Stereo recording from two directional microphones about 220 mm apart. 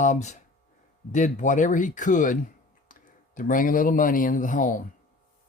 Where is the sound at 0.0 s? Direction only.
35° left (ahead or behind).